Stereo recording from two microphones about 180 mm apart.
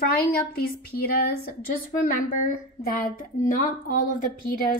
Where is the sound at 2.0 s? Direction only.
50° left (ahead or behind).